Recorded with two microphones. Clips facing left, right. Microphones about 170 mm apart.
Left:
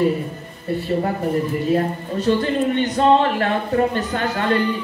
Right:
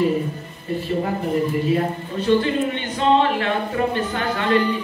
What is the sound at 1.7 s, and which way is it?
A man's voice, 40° left (ahead or behind).